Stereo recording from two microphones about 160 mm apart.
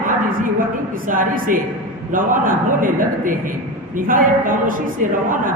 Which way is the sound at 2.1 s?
60° right (ahead or behind).